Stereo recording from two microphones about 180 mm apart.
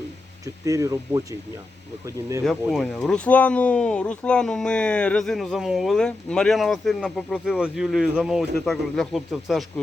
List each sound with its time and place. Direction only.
0.4 s speech: 20° right (ahead or behind)
2.4 s speech: centre (ahead or behind)